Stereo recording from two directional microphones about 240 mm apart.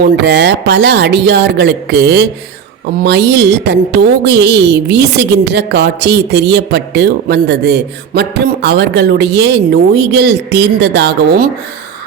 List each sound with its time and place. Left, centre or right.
0.0 s a woman's voice: right